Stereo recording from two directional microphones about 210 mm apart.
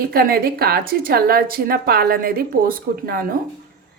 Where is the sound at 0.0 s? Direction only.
45° right (ahead or behind).